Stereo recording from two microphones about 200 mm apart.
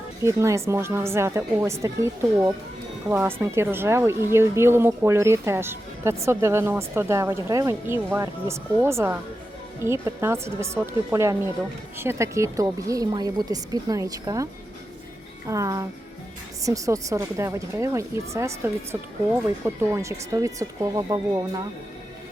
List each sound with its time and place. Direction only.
0.2 s speech: 15° right (ahead or behind)
15.4 s speech: 15° right (ahead or behind)